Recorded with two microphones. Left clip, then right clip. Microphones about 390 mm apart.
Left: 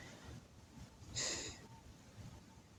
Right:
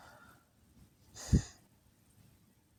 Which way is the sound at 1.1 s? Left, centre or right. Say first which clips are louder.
Right 2 dB; right.